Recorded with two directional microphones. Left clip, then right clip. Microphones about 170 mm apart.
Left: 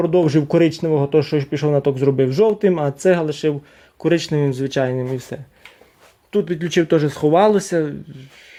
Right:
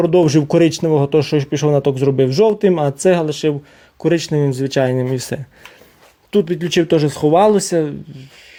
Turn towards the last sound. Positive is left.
turn(degrees=-15)  # may be behind; listen again after turning